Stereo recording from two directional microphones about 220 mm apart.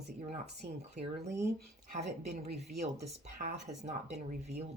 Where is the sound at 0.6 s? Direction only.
45° right (ahead or behind).